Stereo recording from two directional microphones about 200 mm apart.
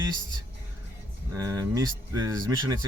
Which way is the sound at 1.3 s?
15° right (ahead or behind).